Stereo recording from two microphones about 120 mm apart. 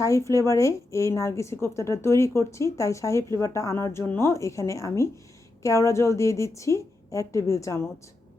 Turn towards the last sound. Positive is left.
turn(degrees=25)  # may be behind; listen again after turning